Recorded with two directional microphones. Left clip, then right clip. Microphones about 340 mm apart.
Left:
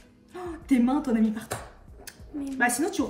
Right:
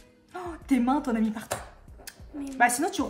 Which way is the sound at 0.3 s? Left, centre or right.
Centre.